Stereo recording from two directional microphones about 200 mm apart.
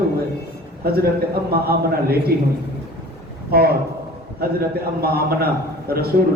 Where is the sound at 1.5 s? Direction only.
50° right (ahead or behind).